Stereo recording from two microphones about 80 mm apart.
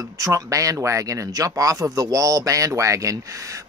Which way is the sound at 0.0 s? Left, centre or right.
Right.